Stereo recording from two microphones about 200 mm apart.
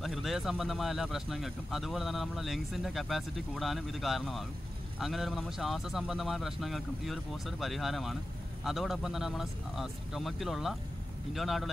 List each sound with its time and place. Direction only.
0.0 s speech: centre (ahead or behind)